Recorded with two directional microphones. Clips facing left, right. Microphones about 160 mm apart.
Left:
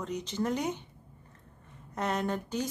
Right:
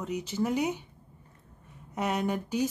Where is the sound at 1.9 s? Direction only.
10° right (ahead or behind).